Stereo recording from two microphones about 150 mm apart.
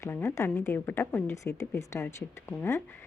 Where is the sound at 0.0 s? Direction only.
15° left (ahead or behind).